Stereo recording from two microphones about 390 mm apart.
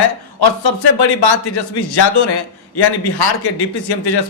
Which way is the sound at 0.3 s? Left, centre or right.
Left.